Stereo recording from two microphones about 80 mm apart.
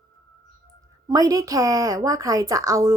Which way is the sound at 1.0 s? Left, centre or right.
Right.